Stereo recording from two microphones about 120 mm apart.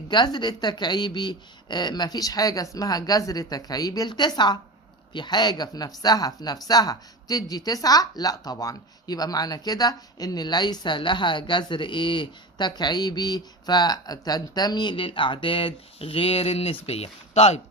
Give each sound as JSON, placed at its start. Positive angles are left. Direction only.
{"t": 0.1, "sound": "a woman's voice", "side_deg": 40}